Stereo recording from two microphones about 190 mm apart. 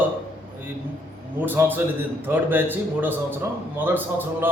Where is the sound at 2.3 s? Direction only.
10° right (ahead or behind).